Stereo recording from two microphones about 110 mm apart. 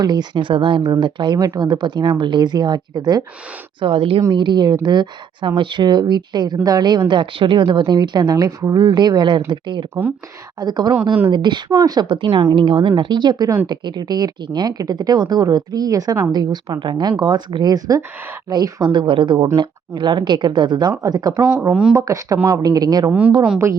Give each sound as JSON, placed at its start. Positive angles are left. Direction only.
{"t": 0.0, "sound": "speech", "side_deg": -40}
{"t": 3.8, "sound": "speech", "side_deg": -55}
{"t": 4.4, "sound": "speech", "side_deg": -40}
{"t": 7.1, "sound": "speech", "side_deg": -50}
{"t": 21.7, "sound": "speech", "side_deg": -5}
{"t": 21.9, "sound": "speech", "side_deg": -30}